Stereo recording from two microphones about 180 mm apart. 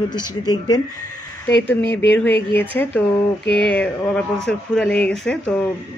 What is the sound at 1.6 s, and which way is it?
Speech, 10° left (ahead or behind).